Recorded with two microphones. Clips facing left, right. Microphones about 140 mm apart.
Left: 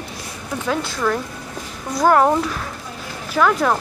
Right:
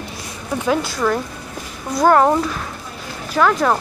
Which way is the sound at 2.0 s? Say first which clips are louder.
Right 1 dB; centre (ahead or behind).